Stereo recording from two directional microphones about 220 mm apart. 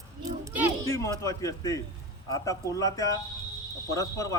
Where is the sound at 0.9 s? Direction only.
15° left (ahead or behind).